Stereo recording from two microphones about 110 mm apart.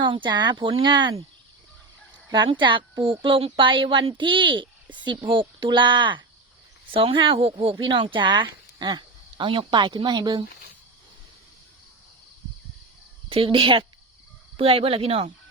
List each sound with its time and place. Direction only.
0.0 s speech: 45° right (ahead or behind)
2.3 s speech: 45° right (ahead or behind)
13.3 s speech: 55° right (ahead or behind)